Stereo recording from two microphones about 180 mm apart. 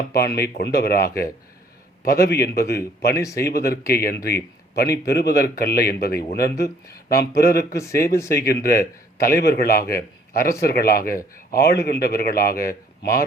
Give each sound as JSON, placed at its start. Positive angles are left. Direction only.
{"t": 0.1, "sound": "a man's voice", "side_deg": 60}
{"t": 3.2, "sound": "speech", "side_deg": 15}
{"t": 3.4, "sound": "a man's voice", "side_deg": 60}